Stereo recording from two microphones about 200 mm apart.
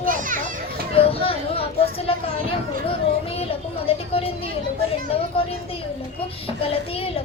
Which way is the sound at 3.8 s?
30° left (ahead or behind).